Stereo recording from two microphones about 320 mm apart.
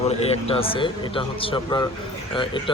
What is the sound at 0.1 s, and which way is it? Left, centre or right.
Speech, centre.